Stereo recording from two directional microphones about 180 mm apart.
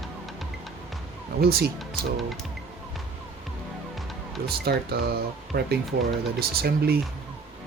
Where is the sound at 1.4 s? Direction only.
60° right (ahead or behind).